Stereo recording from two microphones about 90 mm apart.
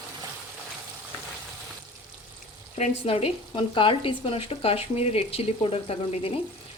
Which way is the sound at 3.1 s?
85° left.